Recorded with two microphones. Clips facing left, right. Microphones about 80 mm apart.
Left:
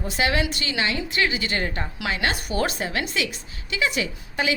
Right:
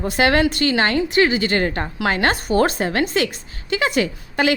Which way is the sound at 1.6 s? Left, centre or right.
Right.